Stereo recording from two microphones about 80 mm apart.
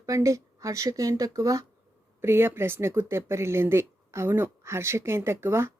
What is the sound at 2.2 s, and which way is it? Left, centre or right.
Speech, right.